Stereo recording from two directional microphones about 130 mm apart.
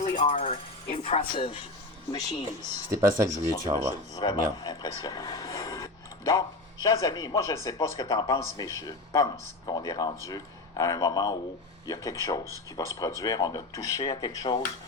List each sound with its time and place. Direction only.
0.0 s music: 90° left
0.3 s speech: 50° left (ahead or behind)
2.1 s speech: 35° left (ahead or behind)
3.2 s speech: 25° right (ahead or behind)
4.1 s speech: 35° left (ahead or behind)
4.5 s a sound: 30° left (ahead or behind)
6.8 s speech: 25° left (ahead or behind)